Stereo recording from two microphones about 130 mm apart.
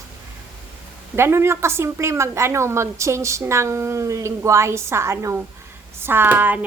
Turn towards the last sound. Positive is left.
turn(degrees=-15)  # may be behind; listen again after turning